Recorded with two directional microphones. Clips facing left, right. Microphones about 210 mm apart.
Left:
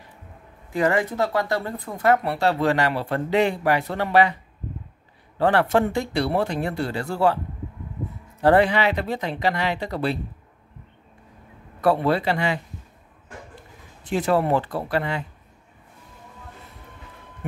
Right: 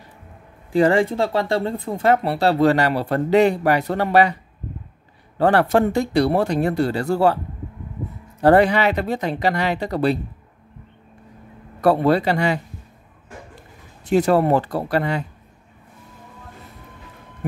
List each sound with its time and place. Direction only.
0.7 s speech: 30° right (ahead or behind)
5.4 s speech: 40° right (ahead or behind)
8.4 s speech: 45° right (ahead or behind)
11.8 s speech: 40° right (ahead or behind)
14.0 s speech: 40° right (ahead or behind)